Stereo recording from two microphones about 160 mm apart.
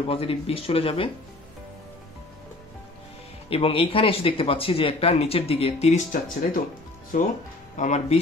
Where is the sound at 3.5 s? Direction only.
35° left (ahead or behind).